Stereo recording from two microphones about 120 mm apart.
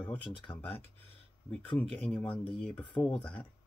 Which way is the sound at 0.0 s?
5° left (ahead or behind).